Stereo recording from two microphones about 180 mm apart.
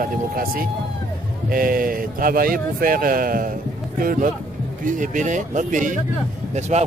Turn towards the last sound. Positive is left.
turn(degrees=-40)  # may be behind; listen again after turning